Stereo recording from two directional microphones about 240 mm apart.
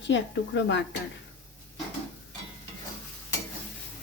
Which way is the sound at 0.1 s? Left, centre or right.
Left.